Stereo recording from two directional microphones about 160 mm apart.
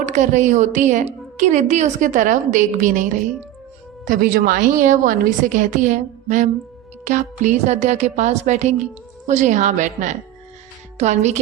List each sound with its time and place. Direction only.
0.0 s a woman's voice: 50° right (ahead or behind)